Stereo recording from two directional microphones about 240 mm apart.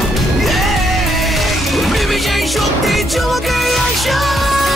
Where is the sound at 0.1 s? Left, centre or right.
Centre.